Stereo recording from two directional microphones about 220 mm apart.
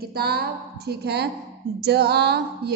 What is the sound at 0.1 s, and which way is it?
A woman's voice, 45° right (ahead or behind).